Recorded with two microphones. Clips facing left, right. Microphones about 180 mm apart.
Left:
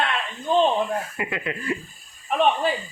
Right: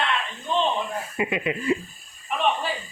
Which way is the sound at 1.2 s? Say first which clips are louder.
Right 3 dB; 20° right (ahead or behind).